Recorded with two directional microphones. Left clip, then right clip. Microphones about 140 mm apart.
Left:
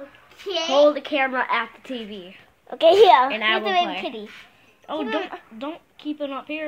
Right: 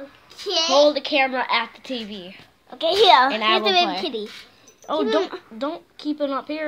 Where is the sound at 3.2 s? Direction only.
15° right (ahead or behind).